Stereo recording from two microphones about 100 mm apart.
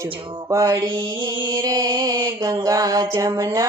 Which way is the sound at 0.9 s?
55° right (ahead or behind).